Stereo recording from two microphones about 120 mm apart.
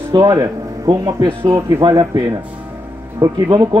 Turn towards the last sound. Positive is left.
turn(degrees=-35)  # may be behind; listen again after turning